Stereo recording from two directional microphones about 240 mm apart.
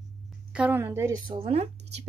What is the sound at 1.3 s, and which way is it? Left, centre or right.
Speech, right.